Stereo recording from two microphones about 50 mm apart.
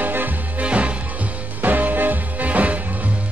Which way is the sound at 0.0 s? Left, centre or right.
Right.